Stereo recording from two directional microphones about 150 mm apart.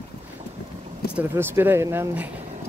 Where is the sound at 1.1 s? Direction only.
10° right (ahead or behind).